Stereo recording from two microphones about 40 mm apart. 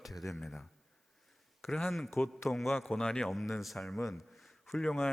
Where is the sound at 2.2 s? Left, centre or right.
Left.